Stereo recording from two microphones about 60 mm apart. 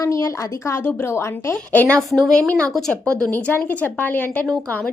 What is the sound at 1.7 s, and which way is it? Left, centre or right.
Speech, left.